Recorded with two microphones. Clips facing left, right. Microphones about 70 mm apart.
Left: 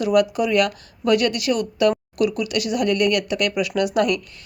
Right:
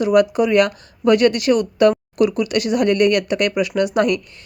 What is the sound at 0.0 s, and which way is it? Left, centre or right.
Speech, right.